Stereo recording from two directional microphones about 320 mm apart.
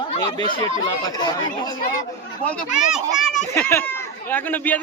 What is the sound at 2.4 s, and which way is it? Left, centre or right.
A child's voice, centre.